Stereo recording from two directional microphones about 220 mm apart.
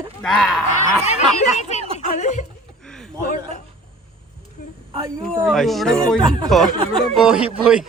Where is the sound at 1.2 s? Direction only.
30° left (ahead or behind).